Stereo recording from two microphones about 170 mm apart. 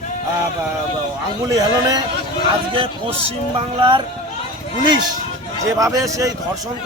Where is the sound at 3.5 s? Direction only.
30° right (ahead or behind).